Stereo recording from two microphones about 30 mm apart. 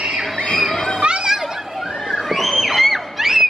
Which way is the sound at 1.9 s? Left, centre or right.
Centre.